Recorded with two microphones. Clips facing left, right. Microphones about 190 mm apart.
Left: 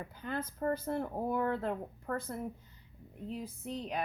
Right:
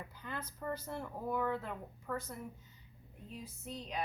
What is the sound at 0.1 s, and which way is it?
Speech, 55° left (ahead or behind).